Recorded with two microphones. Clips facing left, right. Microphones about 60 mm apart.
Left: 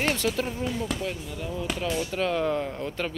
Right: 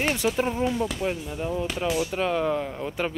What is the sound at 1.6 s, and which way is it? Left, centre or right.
Speech, centre.